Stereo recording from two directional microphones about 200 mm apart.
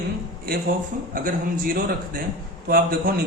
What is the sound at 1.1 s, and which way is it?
A man's voice, 45° right (ahead or behind).